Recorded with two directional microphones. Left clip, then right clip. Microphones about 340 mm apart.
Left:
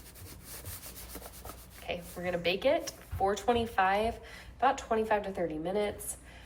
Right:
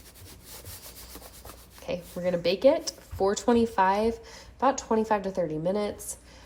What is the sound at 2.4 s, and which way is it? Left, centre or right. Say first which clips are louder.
Speech: right 6 dB; centre.